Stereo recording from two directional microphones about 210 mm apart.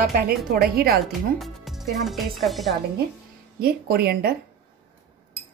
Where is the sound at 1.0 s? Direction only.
Centre (ahead or behind).